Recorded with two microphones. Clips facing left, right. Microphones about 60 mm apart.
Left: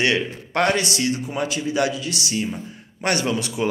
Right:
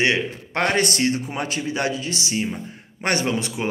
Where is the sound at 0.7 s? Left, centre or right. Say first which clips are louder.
Right 2 dB; right.